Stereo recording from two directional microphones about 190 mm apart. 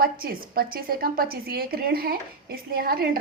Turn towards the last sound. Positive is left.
turn(degrees=-55)  # may be behind; listen again after turning